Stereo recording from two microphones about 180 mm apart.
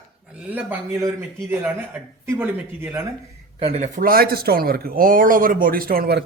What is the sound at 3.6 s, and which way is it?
Speech, 35° right (ahead or behind).